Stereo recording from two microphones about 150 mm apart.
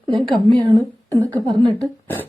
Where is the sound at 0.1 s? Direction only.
30° right (ahead or behind).